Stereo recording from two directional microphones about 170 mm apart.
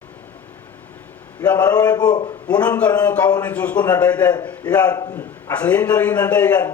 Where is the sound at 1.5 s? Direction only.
20° left (ahead or behind).